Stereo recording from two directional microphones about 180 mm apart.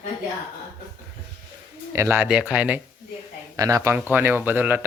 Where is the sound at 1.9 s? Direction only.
15° right (ahead or behind).